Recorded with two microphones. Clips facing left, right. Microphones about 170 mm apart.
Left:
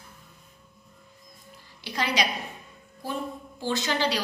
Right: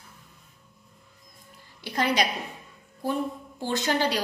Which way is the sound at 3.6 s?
55° right (ahead or behind).